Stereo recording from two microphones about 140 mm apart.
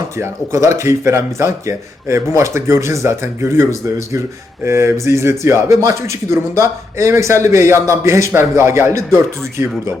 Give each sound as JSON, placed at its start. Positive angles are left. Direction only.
{"t": 0.2, "sound": "speech", "side_deg": -20}